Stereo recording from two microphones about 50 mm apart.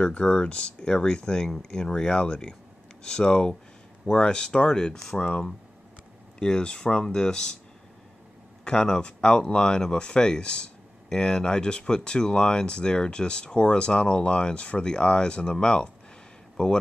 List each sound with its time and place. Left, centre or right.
0.0 s speech: centre
6.4 s speech: centre
8.6 s speech: centre